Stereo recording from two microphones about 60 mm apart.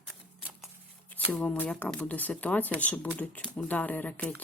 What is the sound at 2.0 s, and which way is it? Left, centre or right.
Speech, left.